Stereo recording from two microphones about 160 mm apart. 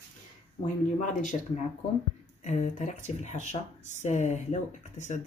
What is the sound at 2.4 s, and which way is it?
Speech, 50° left (ahead or behind).